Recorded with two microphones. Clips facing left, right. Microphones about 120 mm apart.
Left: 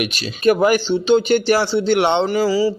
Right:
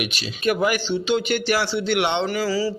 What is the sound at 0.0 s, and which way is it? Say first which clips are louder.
A man's voice: left 7 dB; 45° left (ahead or behind).